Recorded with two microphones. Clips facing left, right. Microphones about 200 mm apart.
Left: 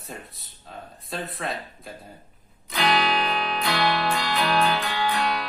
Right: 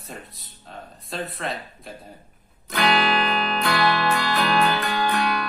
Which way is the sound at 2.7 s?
55° right (ahead or behind).